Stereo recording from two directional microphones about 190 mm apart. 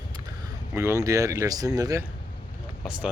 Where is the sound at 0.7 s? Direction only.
15° right (ahead or behind).